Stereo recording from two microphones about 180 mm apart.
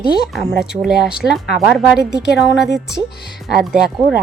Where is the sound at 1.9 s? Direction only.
65° left (ahead or behind).